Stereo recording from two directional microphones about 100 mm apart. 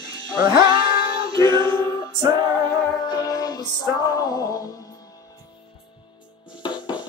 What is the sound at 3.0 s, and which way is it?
Music, 40° left (ahead or behind).